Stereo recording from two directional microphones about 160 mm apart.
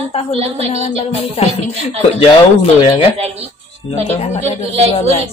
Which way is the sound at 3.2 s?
40° right (ahead or behind).